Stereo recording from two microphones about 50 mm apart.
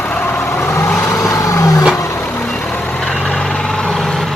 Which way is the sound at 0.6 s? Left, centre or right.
Left.